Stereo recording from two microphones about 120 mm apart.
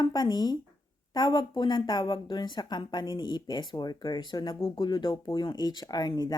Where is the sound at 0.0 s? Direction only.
35° left (ahead or behind).